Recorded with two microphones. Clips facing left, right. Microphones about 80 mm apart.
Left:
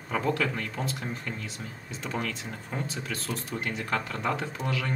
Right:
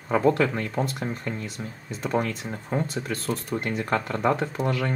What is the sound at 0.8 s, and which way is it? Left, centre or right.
Speech, right.